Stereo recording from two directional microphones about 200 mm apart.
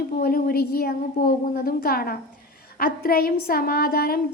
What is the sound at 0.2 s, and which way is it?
A woman's voice, 50° left (ahead or behind).